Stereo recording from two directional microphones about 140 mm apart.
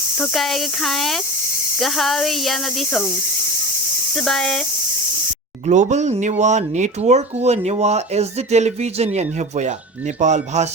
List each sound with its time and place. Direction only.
0.2 s speech: centre (ahead or behind)
4.1 s speech: 5° left (ahead or behind)
5.6 s speech: 55° right (ahead or behind)